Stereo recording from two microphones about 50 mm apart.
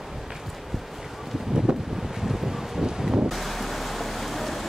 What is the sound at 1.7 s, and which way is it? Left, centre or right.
Wind noise, centre.